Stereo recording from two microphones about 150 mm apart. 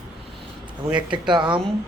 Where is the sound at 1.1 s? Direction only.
30° right (ahead or behind).